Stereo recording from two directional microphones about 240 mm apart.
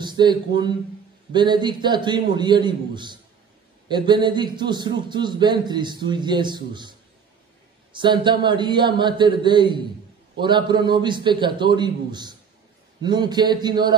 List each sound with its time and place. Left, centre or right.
0.0 s a man's voice: centre